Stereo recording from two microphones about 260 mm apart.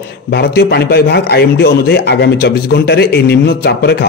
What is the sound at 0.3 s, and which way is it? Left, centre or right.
A man's voice, left.